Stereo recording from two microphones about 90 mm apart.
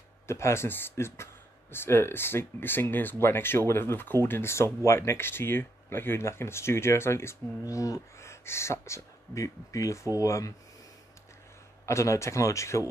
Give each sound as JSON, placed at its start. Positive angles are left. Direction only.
{"t": 0.3, "sound": "speech", "side_deg": 30}
{"t": 11.8, "sound": "speech", "side_deg": 35}